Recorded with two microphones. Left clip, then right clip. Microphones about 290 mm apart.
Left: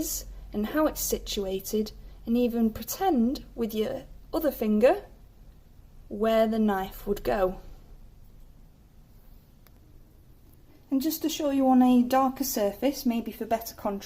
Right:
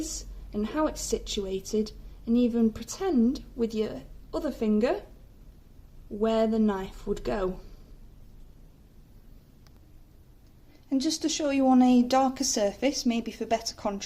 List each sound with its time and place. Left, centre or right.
0.0 s a woman's voice: left
6.2 s a woman's voice: left
10.8 s speech: centre